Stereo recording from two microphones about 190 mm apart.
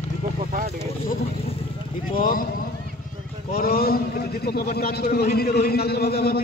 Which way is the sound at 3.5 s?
50° left (ahead or behind).